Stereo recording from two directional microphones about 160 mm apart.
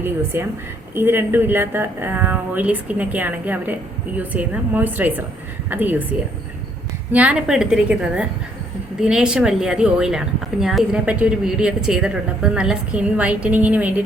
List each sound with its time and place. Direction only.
0.0 s speech: 15° right (ahead or behind)